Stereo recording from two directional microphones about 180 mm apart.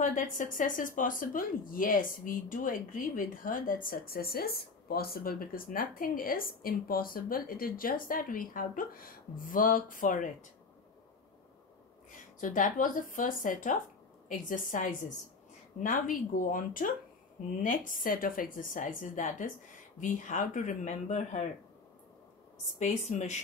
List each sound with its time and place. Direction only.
0.0 s speech: 45° left (ahead or behind)
12.4 s speech: 45° left (ahead or behind)
22.8 s speech: 40° left (ahead or behind)